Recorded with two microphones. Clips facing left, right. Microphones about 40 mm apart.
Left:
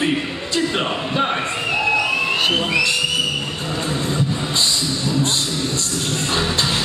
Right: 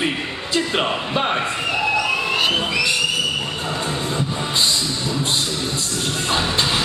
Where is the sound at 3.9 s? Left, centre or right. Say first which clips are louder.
Left 2 dB; centre.